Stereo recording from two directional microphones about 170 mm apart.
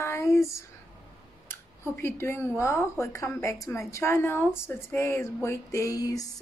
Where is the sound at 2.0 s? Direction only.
15° left (ahead or behind).